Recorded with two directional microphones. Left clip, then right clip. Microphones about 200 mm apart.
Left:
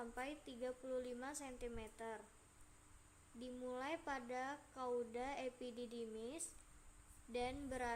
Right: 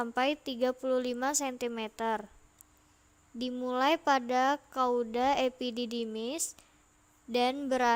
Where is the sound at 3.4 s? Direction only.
50° right (ahead or behind).